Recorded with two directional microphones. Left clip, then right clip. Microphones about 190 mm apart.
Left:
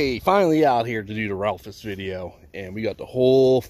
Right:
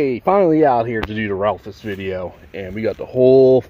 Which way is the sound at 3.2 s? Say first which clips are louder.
Right 6 dB; 15° left (ahead or behind).